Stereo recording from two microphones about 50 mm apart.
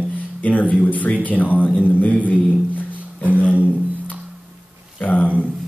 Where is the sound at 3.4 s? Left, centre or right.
Left.